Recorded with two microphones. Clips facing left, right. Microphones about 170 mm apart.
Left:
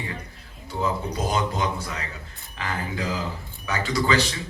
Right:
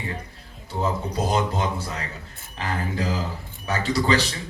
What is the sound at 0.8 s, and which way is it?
Speech, 35° right (ahead or behind).